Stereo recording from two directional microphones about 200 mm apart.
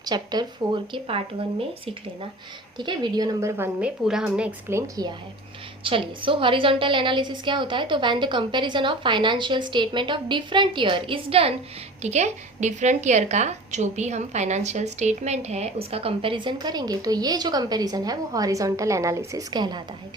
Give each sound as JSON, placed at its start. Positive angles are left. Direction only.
{"t": 0.0, "sound": "a woman's voice", "side_deg": -20}
{"t": 2.7, "sound": "a woman's voice", "side_deg": -20}
{"t": 5.8, "sound": "a woman's voice", "side_deg": -25}